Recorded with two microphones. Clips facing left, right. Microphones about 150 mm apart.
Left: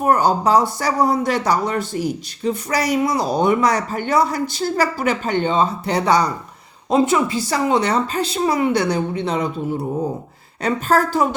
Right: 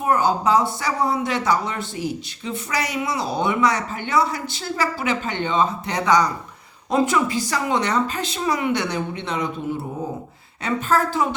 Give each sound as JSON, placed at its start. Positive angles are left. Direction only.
{"t": 0.0, "sound": "speech", "side_deg": 40}
{"t": 10.6, "sound": "speech", "side_deg": 40}